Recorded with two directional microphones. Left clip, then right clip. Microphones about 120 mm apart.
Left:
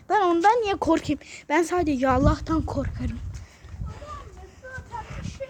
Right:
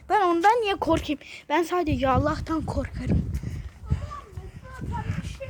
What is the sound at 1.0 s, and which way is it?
A woman's voice, 5° right (ahead or behind).